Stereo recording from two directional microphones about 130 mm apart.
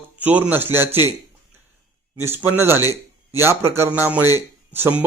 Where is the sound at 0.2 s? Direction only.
15° right (ahead or behind).